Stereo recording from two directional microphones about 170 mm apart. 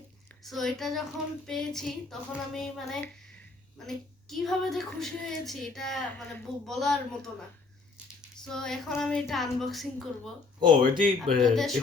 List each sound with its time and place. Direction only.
0.4 s a woman's voice: centre (ahead or behind)
8.4 s a woman's voice: 5° left (ahead or behind)
10.7 s speech: 55° right (ahead or behind)
11.3 s a woman's voice: 5° left (ahead or behind)